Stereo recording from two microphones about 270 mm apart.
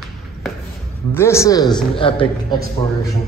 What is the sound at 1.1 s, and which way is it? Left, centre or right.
A woman's voice, centre.